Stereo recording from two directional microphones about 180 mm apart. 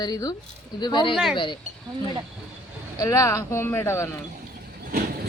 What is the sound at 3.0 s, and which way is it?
Speech, 15° left (ahead or behind).